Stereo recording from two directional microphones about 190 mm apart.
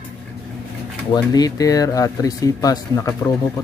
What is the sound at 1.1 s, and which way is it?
Speech, 20° left (ahead or behind).